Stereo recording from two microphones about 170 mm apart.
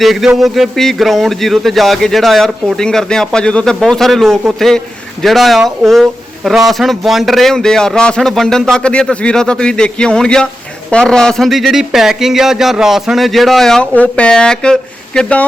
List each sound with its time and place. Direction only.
0.0 s a man's voice: centre (ahead or behind)